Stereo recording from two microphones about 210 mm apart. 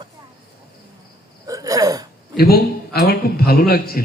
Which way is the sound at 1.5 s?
15° right (ahead or behind).